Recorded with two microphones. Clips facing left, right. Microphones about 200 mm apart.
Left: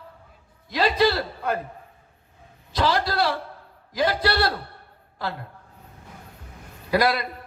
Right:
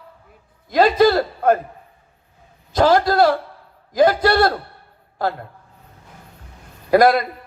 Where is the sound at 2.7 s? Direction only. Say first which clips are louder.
Right 8 dB; 45° right (ahead or behind).